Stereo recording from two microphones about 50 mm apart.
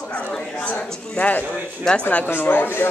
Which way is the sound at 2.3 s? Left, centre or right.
Left.